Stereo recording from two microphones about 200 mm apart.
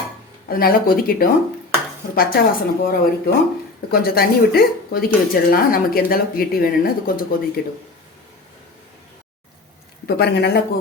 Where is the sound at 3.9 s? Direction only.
50° left (ahead or behind).